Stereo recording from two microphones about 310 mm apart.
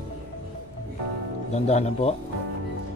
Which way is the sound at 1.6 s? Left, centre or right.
Centre.